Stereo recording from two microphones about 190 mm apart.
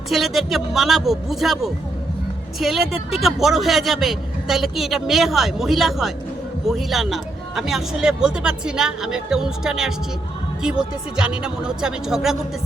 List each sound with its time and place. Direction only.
0.1 s speech: centre (ahead or behind)